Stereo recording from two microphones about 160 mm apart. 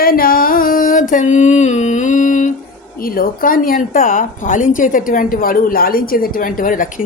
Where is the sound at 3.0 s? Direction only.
65° left (ahead or behind).